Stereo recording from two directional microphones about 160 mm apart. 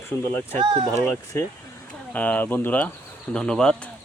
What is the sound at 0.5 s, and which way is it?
Speech, 35° right (ahead or behind).